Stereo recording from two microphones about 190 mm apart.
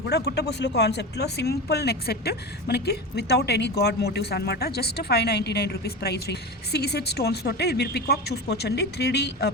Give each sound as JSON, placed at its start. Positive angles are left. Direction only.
{"t": 0.1, "sound": "speech", "side_deg": 60}